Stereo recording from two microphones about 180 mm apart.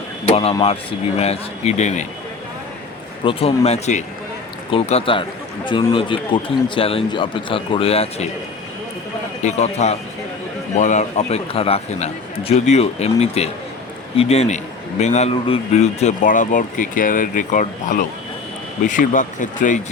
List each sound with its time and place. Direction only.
0.3 s a man's voice: 35° left (ahead or behind)
3.2 s a man's voice: 35° left (ahead or behind)
9.4 s a man's voice: 40° left (ahead or behind)